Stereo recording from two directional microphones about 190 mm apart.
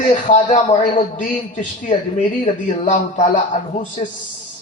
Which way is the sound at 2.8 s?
40° left (ahead or behind).